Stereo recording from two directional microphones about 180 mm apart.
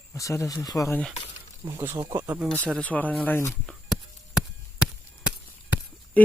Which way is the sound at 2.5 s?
5° left (ahead or behind).